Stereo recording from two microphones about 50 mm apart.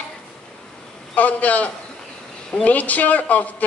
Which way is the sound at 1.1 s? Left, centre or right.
Left.